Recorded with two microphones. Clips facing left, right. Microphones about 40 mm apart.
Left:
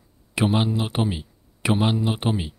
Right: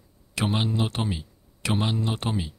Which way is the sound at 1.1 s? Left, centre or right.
Centre.